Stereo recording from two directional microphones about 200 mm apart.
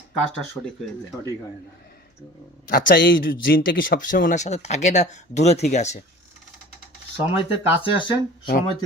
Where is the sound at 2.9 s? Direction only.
50° left (ahead or behind).